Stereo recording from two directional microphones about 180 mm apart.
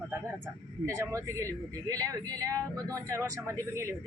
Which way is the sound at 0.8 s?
15° right (ahead or behind).